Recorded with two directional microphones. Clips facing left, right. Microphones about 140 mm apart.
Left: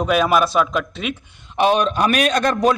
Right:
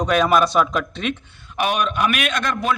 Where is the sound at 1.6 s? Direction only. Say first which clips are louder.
Left 4 dB; 30° left (ahead or behind).